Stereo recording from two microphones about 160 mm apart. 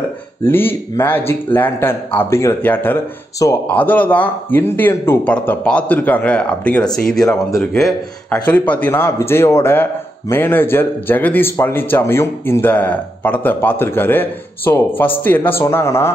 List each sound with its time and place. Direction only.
0.5 s a man's voice: 15° left (ahead or behind)